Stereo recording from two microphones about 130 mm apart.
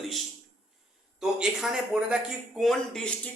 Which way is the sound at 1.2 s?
5° right (ahead or behind).